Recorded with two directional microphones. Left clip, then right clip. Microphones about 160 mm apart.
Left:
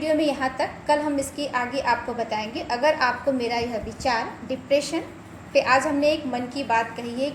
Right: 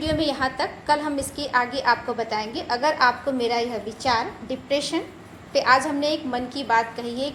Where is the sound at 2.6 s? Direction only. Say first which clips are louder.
Right 1 dB; 25° right (ahead or behind).